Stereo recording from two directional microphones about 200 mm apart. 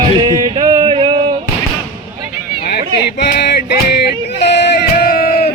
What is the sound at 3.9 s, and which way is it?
Music, 55° left (ahead or behind).